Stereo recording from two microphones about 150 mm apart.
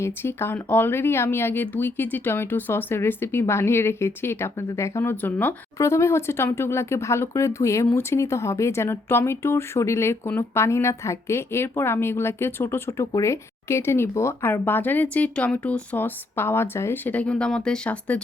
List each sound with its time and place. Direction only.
0.0 s speech: 15° left (ahead or behind)